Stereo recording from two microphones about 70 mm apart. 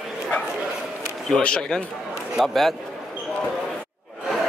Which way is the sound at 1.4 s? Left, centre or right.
Centre.